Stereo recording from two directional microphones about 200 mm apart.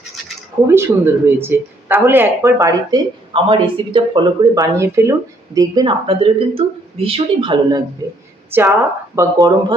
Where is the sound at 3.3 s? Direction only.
25° right (ahead or behind).